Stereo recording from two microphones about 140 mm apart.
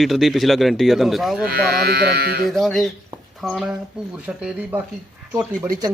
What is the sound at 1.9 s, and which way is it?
Speech, 90° right.